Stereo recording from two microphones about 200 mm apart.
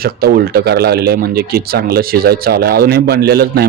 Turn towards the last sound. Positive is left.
turn(degrees=-50)  # may be behind; listen again after turning